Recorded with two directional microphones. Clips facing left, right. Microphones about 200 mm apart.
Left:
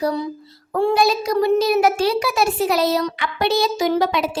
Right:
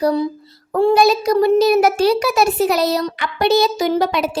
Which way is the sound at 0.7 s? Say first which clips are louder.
Right 4 dB; 35° right (ahead or behind).